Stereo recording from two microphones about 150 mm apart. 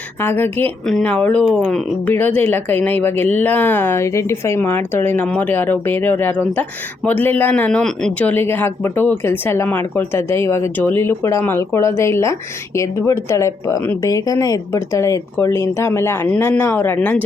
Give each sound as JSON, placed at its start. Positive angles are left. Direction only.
{"t": 0.2, "sound": "speech", "side_deg": 15}